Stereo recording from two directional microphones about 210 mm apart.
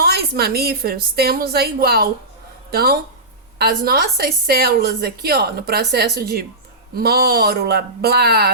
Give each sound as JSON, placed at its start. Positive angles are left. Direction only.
{"t": 0.0, "sound": "a woman's voice", "side_deg": -50}